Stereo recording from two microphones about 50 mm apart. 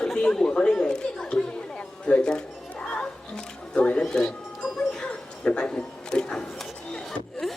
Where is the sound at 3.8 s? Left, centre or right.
Left.